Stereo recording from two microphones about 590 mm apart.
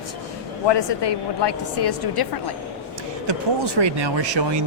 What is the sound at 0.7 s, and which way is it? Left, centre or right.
A woman's voice, left.